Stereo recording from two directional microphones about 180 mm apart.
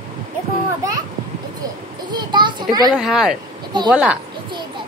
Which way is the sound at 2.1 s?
25° right (ahead or behind).